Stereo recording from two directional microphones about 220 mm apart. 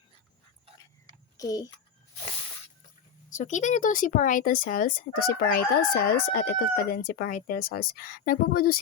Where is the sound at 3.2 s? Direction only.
35° left (ahead or behind).